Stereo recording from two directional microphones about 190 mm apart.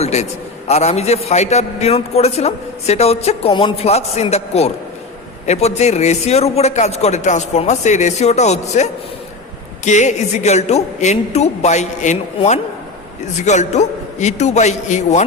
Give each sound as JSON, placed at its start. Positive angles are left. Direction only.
{"t": 0.0, "sound": "a man's voice", "side_deg": 35}